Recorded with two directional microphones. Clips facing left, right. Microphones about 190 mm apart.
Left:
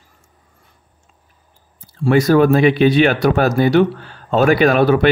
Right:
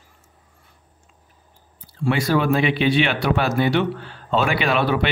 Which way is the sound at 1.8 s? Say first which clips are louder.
Left 7 dB; 45° left (ahead or behind).